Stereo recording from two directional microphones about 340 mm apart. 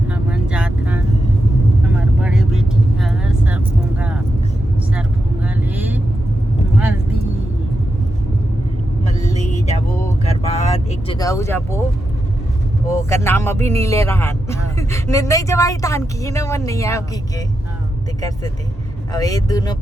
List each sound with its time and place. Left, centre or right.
0.1 s vehicle: centre
5.7 s vehicle: centre
9.0 s vehicle: centre
12.9 s speech: centre
19.1 s speech: centre